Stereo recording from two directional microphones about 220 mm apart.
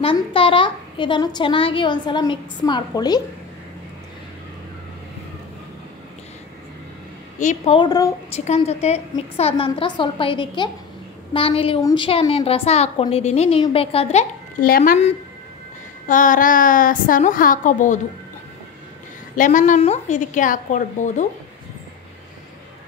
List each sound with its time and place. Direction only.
0.0 s a woman's voice: 25° left (ahead or behind)
7.3 s a woman's voice: 30° left (ahead or behind)
8.5 s a woman's voice: 30° left (ahead or behind)
19.3 s a woman's voice: 35° left (ahead or behind)